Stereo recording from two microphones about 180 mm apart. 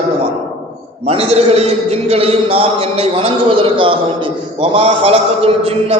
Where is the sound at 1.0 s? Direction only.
35° right (ahead or behind).